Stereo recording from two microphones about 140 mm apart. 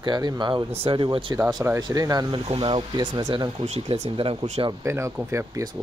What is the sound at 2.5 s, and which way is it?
Speech, 40° right (ahead or behind).